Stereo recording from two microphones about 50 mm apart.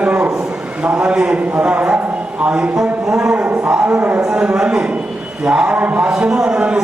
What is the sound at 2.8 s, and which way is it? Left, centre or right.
Speech, centre.